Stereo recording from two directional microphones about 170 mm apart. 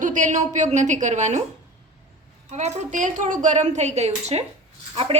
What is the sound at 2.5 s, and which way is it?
A woman's voice, 45° right (ahead or behind).